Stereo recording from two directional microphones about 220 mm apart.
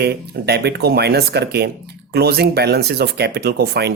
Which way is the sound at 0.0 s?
45° right (ahead or behind).